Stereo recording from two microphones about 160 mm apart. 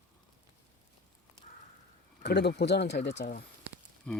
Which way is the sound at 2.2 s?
90° left.